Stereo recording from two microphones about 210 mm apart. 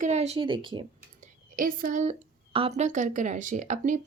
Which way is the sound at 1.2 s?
40° right (ahead or behind).